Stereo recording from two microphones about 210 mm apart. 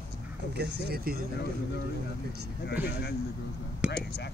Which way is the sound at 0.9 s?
45° right (ahead or behind).